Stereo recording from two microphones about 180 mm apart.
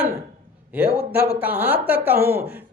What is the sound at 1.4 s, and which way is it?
Speech, 10° right (ahead or behind).